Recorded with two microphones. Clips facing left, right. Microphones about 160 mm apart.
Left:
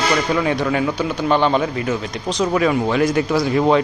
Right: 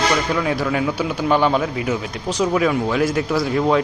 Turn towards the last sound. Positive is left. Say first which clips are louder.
# left 2 dB
turn(degrees=0)  # may be behind; listen again after turning